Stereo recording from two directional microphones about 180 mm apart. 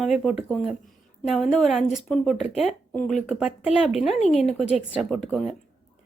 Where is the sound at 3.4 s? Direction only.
5° right (ahead or behind).